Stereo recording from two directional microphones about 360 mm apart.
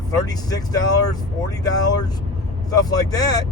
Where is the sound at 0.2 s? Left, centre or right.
Centre.